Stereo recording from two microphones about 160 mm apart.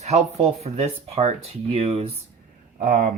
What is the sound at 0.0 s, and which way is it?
Speech, 45° right (ahead or behind).